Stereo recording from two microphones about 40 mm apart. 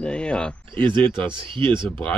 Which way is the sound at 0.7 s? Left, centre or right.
Left.